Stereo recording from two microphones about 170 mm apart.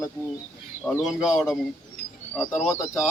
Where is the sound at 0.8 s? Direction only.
15° left (ahead or behind).